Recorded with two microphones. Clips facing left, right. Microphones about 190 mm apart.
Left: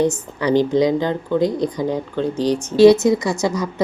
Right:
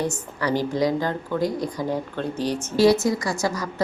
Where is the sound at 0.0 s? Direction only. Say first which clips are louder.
Left 7 dB; 20° left (ahead or behind).